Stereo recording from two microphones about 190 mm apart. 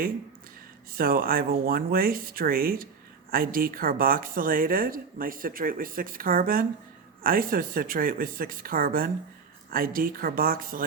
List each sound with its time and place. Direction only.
0.9 s speech: 50° right (ahead or behind)